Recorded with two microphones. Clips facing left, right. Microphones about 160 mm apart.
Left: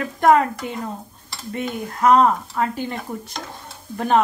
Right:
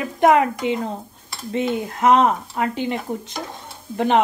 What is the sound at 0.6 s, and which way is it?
Speech, 90° right.